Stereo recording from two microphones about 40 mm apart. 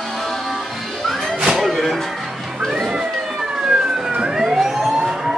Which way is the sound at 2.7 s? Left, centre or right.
Centre.